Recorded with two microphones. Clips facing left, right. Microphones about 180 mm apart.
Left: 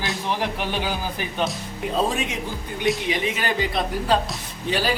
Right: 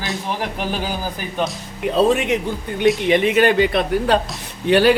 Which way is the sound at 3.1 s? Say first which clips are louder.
Right 10 dB; 65° right (ahead or behind).